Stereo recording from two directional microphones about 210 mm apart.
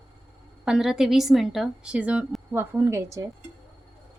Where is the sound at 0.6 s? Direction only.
5° right (ahead or behind).